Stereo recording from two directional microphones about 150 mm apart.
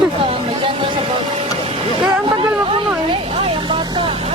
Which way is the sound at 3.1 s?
40° right (ahead or behind).